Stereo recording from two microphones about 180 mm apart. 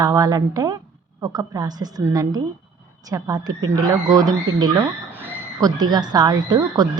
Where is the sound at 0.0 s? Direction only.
20° right (ahead or behind).